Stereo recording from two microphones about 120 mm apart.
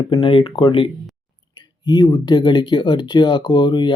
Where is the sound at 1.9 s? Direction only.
35° left (ahead or behind).